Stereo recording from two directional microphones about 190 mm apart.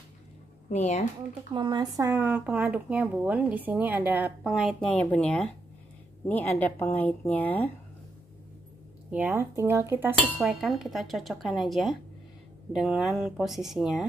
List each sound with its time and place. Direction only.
0.7 s speech: 35° left (ahead or behind)
1.5 s a woman's voice: 25° right (ahead or behind); by 7.7 s 10° left (ahead or behind)
9.1 s speech: 10° right (ahead or behind)